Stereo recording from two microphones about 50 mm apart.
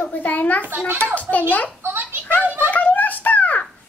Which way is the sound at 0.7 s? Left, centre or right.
Right.